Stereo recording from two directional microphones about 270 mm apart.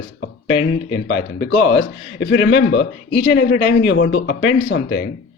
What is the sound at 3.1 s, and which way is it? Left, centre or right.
Speech, centre.